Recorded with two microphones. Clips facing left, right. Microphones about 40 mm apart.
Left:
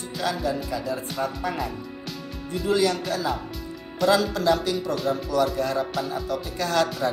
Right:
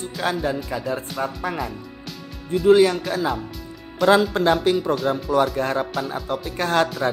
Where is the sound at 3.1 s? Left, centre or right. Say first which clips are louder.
Right 3 dB; right.